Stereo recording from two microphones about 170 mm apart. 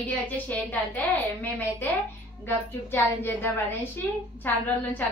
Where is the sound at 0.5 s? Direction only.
10° left (ahead or behind).